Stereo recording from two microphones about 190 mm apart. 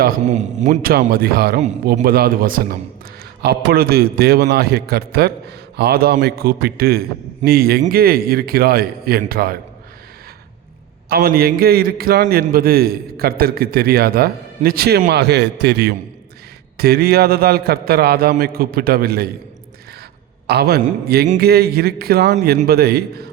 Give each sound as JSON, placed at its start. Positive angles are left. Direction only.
{"t": 0.3, "sound": "a man's voice", "side_deg": -40}
{"t": 11.1, "sound": "a man's voice", "side_deg": -50}
{"t": 20.5, "sound": "a man's voice", "side_deg": -55}